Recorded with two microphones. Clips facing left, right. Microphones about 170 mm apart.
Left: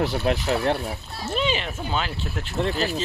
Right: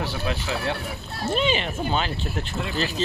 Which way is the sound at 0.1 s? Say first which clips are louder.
Left 5 dB; 40° left (ahead or behind).